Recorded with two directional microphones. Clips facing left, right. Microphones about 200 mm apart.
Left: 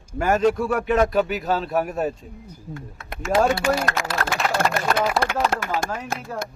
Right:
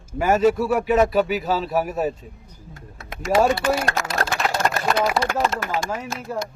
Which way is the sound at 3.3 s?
5° right (ahead or behind).